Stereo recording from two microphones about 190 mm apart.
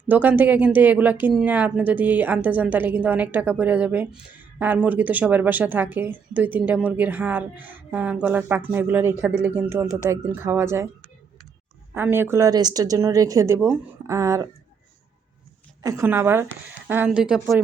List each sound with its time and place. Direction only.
0.1 s speech: 10° right (ahead or behind)
11.9 s speech: 10° right (ahead or behind)
15.8 s speech: 15° right (ahead or behind)